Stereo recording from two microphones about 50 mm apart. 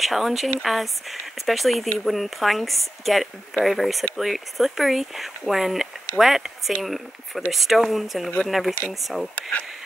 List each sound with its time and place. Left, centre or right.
0.0 s speech: centre
9.3 s speech: left